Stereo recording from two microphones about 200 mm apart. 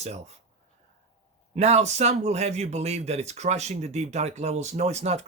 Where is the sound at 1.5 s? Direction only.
35° right (ahead or behind).